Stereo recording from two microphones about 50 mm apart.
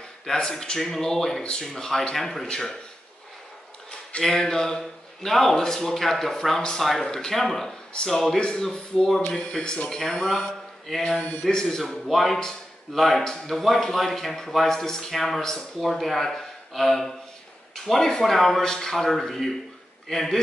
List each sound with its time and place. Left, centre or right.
0.4 s a man's voice: centre
4.2 s a man's voice: centre
11.1 s speech: left
11.4 s a man's voice: centre